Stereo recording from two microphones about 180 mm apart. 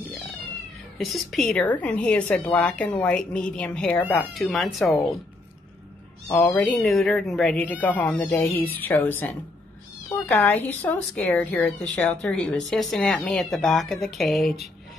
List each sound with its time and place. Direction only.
0.9 s a woman's voice: centre (ahead or behind)
6.2 s a woman's voice: 15° left (ahead or behind)